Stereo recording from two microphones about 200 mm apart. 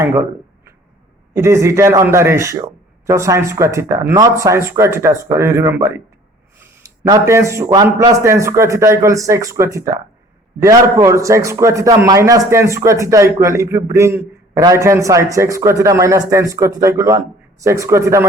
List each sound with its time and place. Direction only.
0.0 s a man's voice: 15° right (ahead or behind)